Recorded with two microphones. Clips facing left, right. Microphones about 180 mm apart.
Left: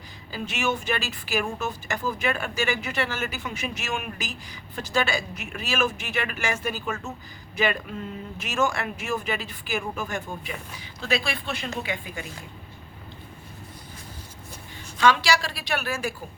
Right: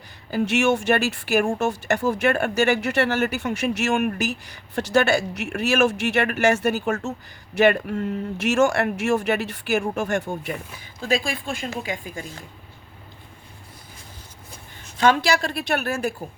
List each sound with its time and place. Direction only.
0.3 s speech: 65° right (ahead or behind)
11.1 s a woman's voice: 45° right (ahead or behind)
14.9 s a woman's voice: 50° right (ahead or behind)